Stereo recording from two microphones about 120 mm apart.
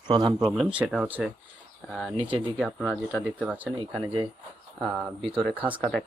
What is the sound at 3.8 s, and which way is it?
Speech, 45° right (ahead or behind).